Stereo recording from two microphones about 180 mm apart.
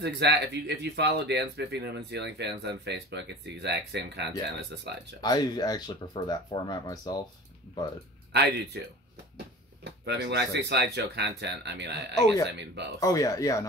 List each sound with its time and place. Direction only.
0.0 s speech: 70° right (ahead or behind)
5.2 s speech: 20° left (ahead or behind)
8.3 s speech: 70° right (ahead or behind)
9.8 s speech: 65° right (ahead or behind)
13.0 s speech: 20° left (ahead or behind)